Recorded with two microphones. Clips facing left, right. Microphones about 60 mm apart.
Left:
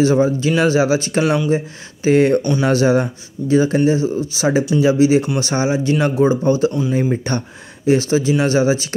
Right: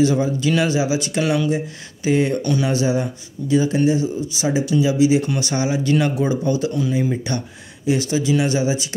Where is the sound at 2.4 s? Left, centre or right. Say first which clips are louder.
Left 2 dB; left.